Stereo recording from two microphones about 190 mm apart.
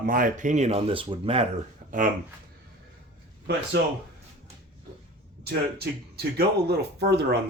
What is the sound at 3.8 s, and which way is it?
Speech, 65° right (ahead or behind).